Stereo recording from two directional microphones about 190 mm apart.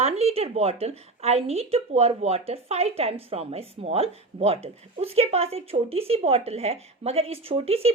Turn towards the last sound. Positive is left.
turn(degrees=-30)  # may be behind; listen again after turning